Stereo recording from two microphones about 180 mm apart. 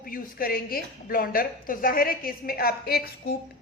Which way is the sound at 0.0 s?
50° left (ahead or behind).